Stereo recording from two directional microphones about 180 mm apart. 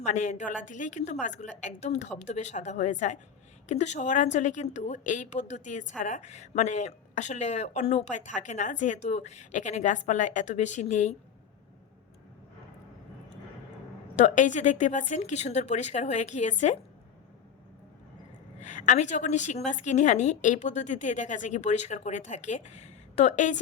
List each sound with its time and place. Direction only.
0.0 s a woman's voice: 40° left (ahead or behind)
14.2 s speech: 40° left (ahead or behind)
18.6 s speech: 45° left (ahead or behind)